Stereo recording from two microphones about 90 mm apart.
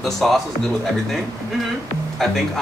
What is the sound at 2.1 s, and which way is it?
Speech, centre (ahead or behind).